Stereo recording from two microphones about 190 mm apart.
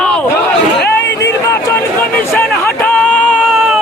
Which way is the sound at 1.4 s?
20° left (ahead or behind).